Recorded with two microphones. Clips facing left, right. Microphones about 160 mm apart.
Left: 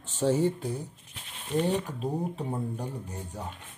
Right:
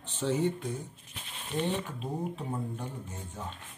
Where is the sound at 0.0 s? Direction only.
40° left (ahead or behind).